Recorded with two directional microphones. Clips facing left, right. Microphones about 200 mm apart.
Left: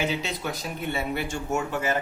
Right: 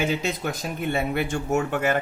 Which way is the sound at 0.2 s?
45° right (ahead or behind).